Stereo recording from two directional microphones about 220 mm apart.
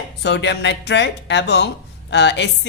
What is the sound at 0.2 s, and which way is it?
A woman's voice, 50° left (ahead or behind).